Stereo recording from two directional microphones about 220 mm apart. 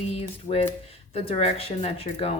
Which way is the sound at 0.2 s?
25° left (ahead or behind).